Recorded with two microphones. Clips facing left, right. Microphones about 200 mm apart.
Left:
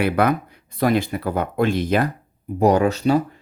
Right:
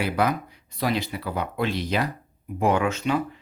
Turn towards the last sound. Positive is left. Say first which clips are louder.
# left 6 dB
turn(degrees=35)  # may be behind; listen again after turning